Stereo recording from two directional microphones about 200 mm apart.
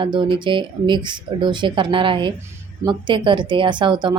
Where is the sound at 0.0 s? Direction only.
25° right (ahead or behind).